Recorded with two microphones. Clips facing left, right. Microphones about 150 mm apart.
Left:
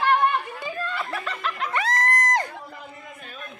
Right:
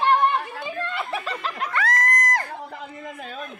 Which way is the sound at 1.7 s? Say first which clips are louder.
Even; 25° left (ahead or behind).